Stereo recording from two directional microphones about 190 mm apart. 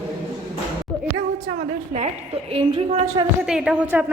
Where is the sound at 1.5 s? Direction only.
40° right (ahead or behind).